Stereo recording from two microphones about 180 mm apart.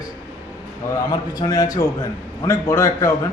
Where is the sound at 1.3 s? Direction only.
20° left (ahead or behind).